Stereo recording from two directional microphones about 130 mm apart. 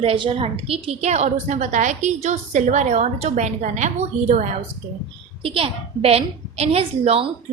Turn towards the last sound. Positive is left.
turn(degrees=-45)  # may be behind; listen again after turning